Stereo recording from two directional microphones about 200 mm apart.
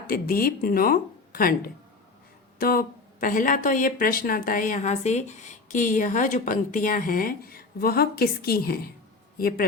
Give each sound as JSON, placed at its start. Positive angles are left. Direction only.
{"t": 0.1, "sound": "speech", "side_deg": 45}